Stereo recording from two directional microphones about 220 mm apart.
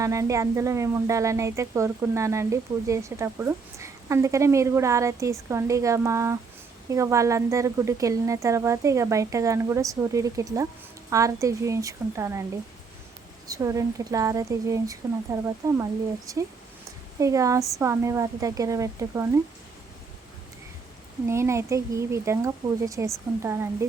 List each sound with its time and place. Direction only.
0.0 s a woman's voice: 15° right (ahead or behind)
13.5 s a woman's voice: 15° right (ahead or behind)
21.2 s a woman's voice: 10° right (ahead or behind)